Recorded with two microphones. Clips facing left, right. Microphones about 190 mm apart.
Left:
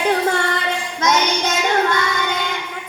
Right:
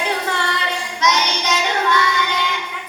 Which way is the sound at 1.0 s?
50° left (ahead or behind).